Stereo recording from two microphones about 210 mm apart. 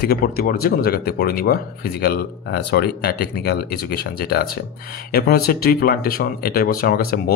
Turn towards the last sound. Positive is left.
turn(degrees=45)  # may be behind; listen again after turning